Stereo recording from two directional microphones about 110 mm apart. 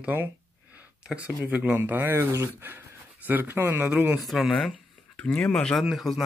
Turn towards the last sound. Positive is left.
turn(degrees=0)  # may be behind; listen again after turning